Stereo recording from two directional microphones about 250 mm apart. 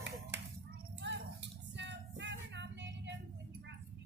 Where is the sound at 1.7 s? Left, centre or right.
Right.